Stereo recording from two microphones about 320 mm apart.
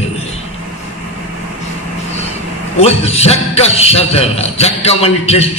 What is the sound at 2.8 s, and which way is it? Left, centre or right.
A man's voice, centre.